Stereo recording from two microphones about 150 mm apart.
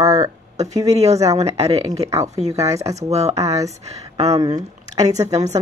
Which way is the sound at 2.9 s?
45° right (ahead or behind).